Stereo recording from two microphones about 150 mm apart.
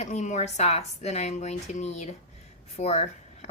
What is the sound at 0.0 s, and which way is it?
A woman's voice, 50° left (ahead or behind).